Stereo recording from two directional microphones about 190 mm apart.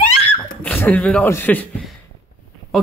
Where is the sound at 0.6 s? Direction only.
10° left (ahead or behind).